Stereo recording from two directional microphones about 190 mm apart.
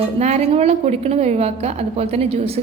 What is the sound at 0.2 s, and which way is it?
A woman's voice, 35° right (ahead or behind).